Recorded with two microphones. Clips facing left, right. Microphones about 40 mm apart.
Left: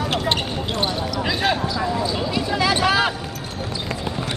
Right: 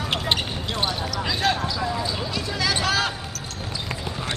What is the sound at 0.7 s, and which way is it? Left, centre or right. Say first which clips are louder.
Basketball bounce: left 2 dB; centre.